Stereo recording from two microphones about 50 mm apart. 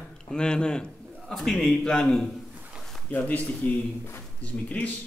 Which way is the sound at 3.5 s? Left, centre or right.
Left.